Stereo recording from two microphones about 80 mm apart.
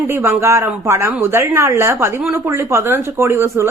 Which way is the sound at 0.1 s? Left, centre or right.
Right.